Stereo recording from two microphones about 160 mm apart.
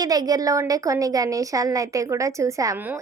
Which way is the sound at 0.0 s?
25° right (ahead or behind).